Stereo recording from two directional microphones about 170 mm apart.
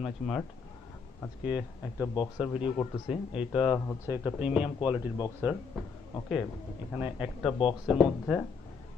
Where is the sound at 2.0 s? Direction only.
25° left (ahead or behind).